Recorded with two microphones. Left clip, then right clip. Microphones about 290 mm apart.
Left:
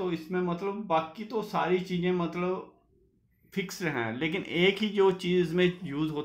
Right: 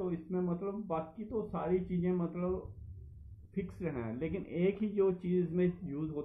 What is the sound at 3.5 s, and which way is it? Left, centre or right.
Speech, left.